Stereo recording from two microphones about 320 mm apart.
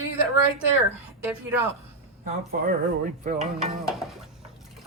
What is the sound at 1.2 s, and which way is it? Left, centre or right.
Speech, centre.